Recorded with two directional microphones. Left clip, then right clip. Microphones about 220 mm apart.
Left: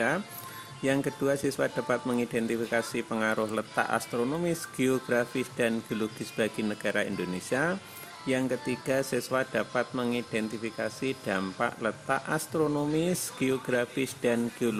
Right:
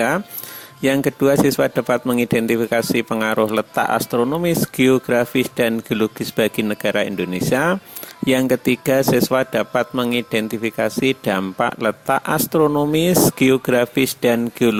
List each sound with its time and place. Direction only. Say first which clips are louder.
0.8 s speech: right 11 dB; 40° right (ahead or behind)